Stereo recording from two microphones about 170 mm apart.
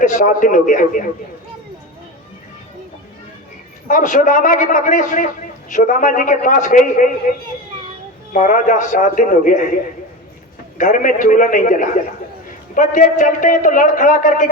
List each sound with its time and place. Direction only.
0.0 s a man's voice: 50° left (ahead or behind)
3.8 s a man's voice: 50° left (ahead or behind)
8.3 s a man's voice: 50° left (ahead or behind)
10.8 s a man's voice: 50° left (ahead or behind)